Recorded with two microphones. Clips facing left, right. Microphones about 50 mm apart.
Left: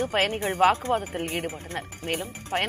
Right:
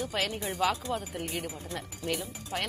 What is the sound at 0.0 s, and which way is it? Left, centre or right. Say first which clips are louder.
Speech: left 7 dB; left.